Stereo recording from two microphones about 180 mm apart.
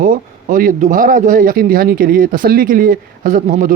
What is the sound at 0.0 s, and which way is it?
Speech, 50° right (ahead or behind).